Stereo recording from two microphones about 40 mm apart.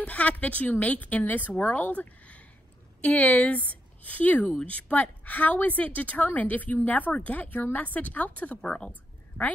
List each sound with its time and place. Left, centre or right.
0.0 s a woman's voice: left
7.1 s a woman's voice: left
8.5 s speech: left